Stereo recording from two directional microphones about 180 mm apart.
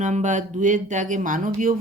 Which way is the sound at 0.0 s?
40° right (ahead or behind).